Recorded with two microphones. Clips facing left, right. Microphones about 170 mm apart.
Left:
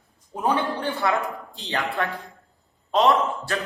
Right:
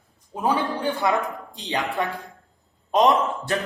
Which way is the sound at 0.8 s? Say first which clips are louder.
Right 1 dB; 10° right (ahead or behind).